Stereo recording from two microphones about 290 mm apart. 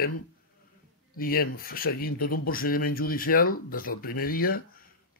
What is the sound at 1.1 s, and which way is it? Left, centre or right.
Speech, left.